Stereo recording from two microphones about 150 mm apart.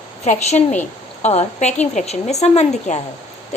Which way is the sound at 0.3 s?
50° left (ahead or behind).